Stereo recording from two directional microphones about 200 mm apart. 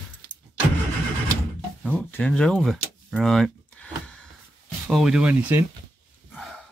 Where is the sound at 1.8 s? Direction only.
10° left (ahead or behind); by 5.7 s 10° right (ahead or behind).